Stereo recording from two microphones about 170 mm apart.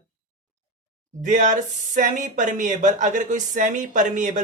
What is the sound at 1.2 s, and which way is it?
Speech, 45° right (ahead or behind).